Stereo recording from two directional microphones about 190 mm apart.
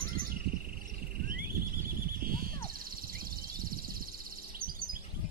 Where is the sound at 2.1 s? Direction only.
50° right (ahead or behind).